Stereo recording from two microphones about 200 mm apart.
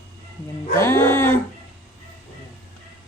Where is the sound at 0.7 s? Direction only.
15° left (ahead or behind).